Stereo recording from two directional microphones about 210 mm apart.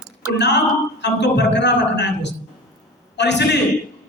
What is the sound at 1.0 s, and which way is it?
A man's voice, 55° left (ahead or behind).